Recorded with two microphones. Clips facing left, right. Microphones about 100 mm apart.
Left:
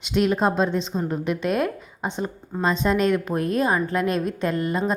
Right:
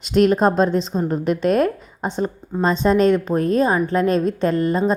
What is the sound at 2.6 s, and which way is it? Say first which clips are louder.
A woman's voice: right 5 dB; 35° right (ahead or behind).